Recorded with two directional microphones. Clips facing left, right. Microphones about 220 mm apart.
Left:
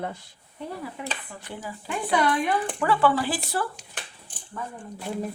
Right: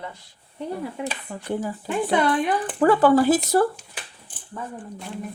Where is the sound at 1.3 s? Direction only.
45° right (ahead or behind).